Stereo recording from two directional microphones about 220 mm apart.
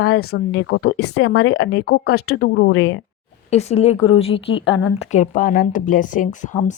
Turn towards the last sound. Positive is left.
turn(degrees=35)  # may be behind; listen again after turning